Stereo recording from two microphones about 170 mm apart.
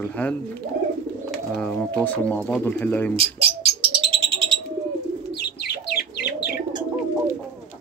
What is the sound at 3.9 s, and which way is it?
Bird, 30° right (ahead or behind).